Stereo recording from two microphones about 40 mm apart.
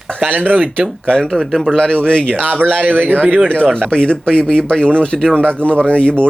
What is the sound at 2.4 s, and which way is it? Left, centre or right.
Speech, right.